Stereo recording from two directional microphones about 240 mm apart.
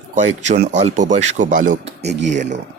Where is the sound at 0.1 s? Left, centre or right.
Right.